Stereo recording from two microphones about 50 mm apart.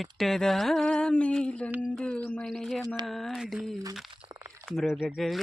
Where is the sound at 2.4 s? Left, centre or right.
Centre.